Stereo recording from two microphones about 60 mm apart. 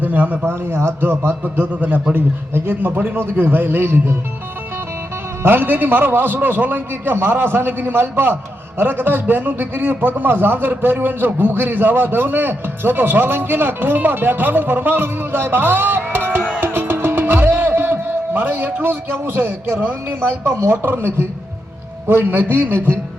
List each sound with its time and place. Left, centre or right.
0.0 s a man's voice: right
5.4 s a man's voice: right